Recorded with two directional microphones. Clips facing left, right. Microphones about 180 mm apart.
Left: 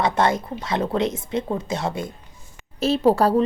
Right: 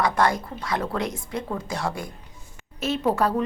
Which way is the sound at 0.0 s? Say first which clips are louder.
Left 2 dB; 25° left (ahead or behind).